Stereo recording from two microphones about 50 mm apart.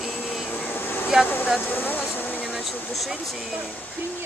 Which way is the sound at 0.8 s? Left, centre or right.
Left.